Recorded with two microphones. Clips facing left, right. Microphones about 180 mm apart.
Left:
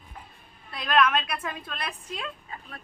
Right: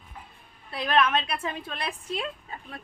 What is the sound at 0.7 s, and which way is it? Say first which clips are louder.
A woman's voice: even; 30° right (ahead or behind).